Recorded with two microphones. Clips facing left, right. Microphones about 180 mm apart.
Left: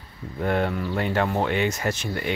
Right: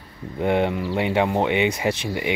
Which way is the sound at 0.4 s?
15° right (ahead or behind).